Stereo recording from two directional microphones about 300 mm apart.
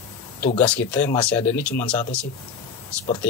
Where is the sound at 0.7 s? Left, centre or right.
Centre.